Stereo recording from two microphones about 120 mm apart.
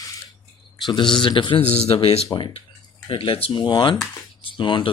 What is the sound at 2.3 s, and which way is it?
Speech, 40° left (ahead or behind).